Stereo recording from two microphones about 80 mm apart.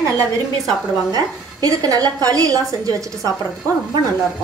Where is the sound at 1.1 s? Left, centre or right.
Right.